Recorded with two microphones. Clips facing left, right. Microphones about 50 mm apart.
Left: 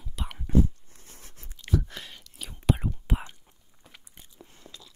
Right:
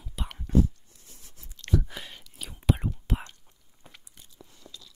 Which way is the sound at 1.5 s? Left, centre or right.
Centre.